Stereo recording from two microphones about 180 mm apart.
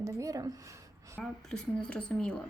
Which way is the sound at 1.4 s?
5° left (ahead or behind).